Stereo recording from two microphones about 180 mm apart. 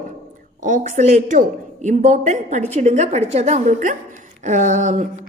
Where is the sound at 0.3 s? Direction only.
45° right (ahead or behind).